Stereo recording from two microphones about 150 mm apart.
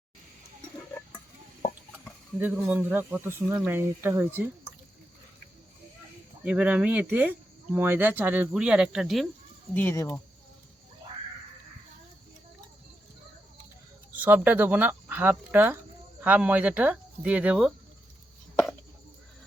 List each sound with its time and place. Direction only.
2.4 s speech: 10° right (ahead or behind)
6.4 s speech: 5° right (ahead or behind)
9.7 s speech: 15° left (ahead or behind)
14.1 s speech: 10° right (ahead or behind)